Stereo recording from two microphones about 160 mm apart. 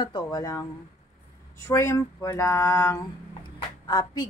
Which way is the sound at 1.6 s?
15° left (ahead or behind).